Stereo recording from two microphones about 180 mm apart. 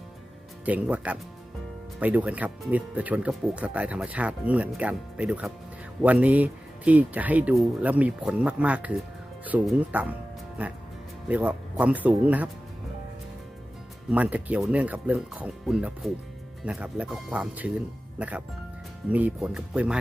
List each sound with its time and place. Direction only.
0.6 s speech: 10° right (ahead or behind)
14.1 s speech: 10° right (ahead or behind)